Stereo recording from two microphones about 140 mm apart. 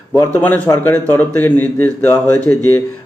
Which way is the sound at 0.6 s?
20° left (ahead or behind).